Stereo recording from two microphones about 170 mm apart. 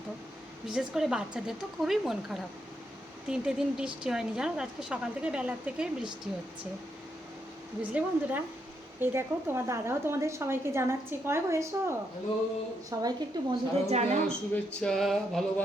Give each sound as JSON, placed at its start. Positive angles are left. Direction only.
{"t": 0.7, "sound": "speech", "side_deg": -5}
{"t": 7.8, "sound": "a woman's voice", "side_deg": -10}
{"t": 13.8, "sound": "speech", "side_deg": -40}
{"t": 14.3, "sound": "speech", "side_deg": 5}